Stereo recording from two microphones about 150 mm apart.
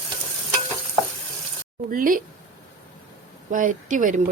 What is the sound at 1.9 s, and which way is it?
Speech, 65° right (ahead or behind).